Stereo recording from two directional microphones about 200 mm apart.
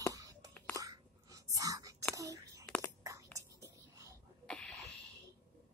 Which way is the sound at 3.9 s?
15° right (ahead or behind).